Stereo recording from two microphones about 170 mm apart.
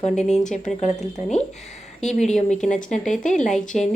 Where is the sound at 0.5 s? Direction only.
45° left (ahead or behind).